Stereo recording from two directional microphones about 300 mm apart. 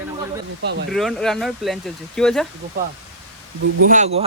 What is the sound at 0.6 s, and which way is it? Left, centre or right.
Speech, right.